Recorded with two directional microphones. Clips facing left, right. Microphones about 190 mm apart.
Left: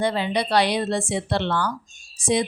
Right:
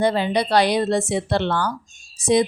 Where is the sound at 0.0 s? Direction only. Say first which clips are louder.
Right 3 dB; 40° right (ahead or behind).